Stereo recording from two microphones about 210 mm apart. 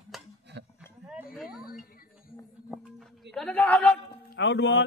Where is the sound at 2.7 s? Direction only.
Centre (ahead or behind).